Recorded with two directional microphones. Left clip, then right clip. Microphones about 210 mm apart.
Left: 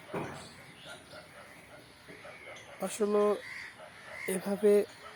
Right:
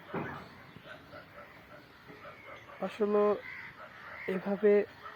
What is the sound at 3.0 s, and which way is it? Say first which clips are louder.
Speech: even; 15° left (ahead or behind).